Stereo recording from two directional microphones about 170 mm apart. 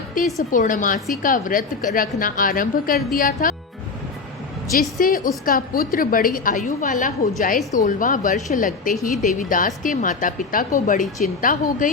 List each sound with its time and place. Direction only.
0.2 s a woman's voice: 50° left (ahead or behind)
4.8 s a woman's voice: 55° left (ahead or behind)